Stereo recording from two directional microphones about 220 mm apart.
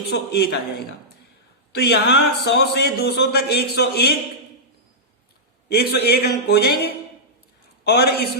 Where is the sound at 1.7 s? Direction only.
50° left (ahead or behind).